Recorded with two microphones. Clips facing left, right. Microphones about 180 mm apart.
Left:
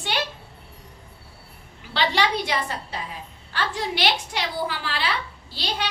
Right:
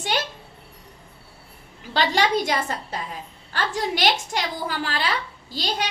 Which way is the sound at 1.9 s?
45° right (ahead or behind).